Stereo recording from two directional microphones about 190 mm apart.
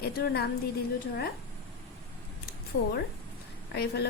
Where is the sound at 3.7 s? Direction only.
60° left (ahead or behind).